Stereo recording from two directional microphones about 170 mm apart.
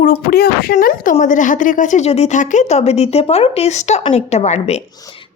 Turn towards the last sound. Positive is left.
turn(degrees=40)  # may be behind; listen again after turning